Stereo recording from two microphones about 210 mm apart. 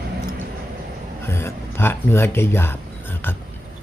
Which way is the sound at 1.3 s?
10° left (ahead or behind).